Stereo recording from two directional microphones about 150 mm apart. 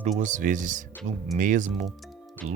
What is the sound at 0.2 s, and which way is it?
Speech, 55° right (ahead or behind).